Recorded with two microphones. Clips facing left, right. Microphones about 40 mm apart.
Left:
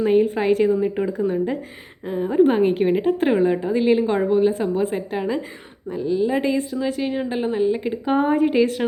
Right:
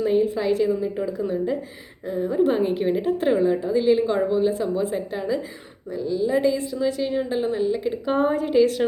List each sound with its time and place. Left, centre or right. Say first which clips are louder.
0.0 s a woman's voice: left 3 dB; left